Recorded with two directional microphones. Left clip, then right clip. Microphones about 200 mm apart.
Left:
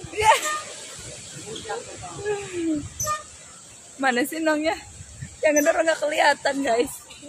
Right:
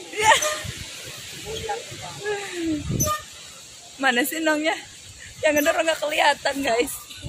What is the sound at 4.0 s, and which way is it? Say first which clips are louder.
Speech: right 1 dB; 5° left (ahead or behind).